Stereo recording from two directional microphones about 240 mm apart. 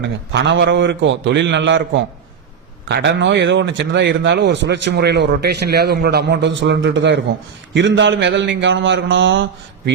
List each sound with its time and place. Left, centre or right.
0.0 s speech: right